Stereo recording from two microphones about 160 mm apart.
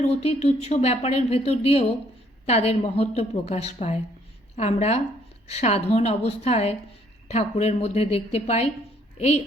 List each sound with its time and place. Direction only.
0.0 s a woman's voice: 40° left (ahead or behind)